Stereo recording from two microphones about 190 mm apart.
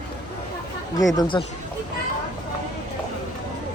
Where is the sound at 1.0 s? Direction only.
25° left (ahead or behind).